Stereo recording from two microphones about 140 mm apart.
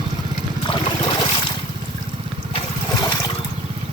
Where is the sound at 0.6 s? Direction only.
40° left (ahead or behind).